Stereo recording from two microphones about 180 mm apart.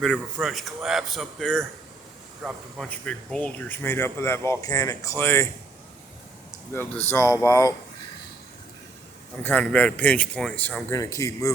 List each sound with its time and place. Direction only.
0.0 s a man's voice: centre (ahead or behind)
7.1 s speech: 15° left (ahead or behind)
9.4 s speech: 10° left (ahead or behind)
10.9 s speech: 20° left (ahead or behind)